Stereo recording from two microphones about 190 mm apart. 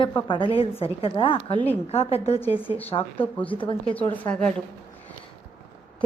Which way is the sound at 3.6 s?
25° left (ahead or behind).